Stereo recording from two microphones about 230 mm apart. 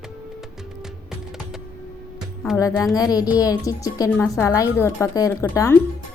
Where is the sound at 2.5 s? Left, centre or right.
Centre.